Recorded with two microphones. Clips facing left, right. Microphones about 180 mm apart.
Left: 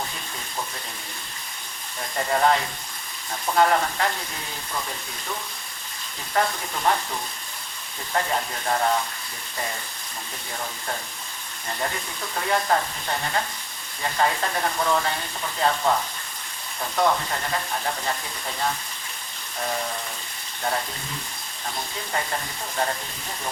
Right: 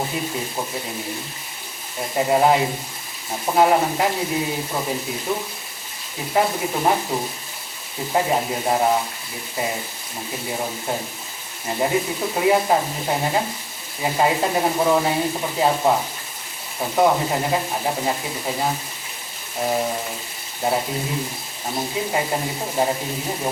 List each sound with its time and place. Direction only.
2.0 s speech: 15° right (ahead or behind)
6.3 s frying: 15° right (ahead or behind)
8.1 s speech: 15° right (ahead or behind)
10.5 s frying: 20° right (ahead or behind)
11.7 s speech: 15° right (ahead or behind)
15.7 s frying: 20° right (ahead or behind)
17.1 s speech: 20° right (ahead or behind)
19.5 s frying: 20° right (ahead or behind)
20.6 s speech: 15° right (ahead or behind)
21.9 s speech: 15° right (ahead or behind)